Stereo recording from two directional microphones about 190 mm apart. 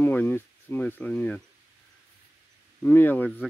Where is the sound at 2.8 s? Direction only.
10° left (ahead or behind).